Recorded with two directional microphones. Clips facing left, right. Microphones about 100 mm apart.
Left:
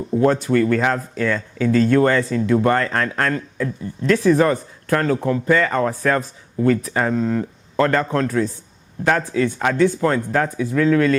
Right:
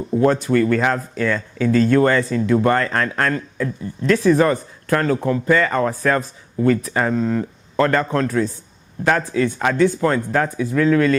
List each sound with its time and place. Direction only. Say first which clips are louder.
0.2 s speech: even; 20° right (ahead or behind)